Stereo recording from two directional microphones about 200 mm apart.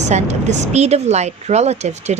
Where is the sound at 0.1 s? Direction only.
35° right (ahead or behind).